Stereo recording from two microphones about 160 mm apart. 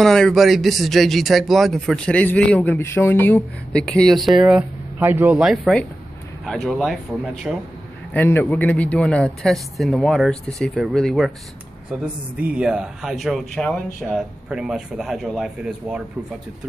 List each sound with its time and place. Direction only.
0.0 s speech: 5° left (ahead or behind)
8.1 s speech: 10° left (ahead or behind); by 16.0 s 5° right (ahead or behind)